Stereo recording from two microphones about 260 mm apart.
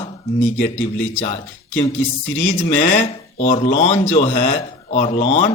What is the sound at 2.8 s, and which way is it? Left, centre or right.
A man's voice, left.